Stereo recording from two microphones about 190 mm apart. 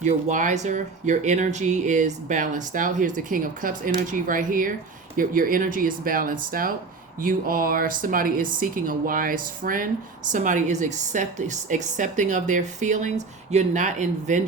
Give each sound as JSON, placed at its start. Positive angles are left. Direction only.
{"t": 0.0, "sound": "speech", "side_deg": -40}